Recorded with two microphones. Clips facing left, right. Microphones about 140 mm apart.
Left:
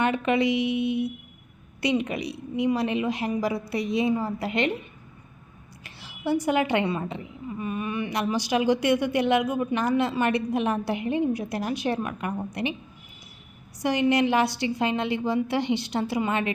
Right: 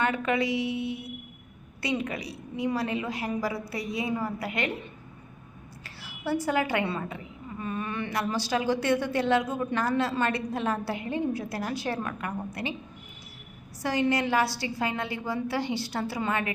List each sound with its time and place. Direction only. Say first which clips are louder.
0.0 s a woman's voice: left 4 dB; 20° left (ahead or behind)
5.8 s a woman's voice: left 4 dB; 20° left (ahead or behind)
13.8 s a woman's voice: left 4 dB; 20° left (ahead or behind)